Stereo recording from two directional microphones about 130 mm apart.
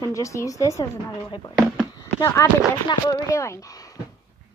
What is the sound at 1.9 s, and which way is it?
Speech, 25° left (ahead or behind).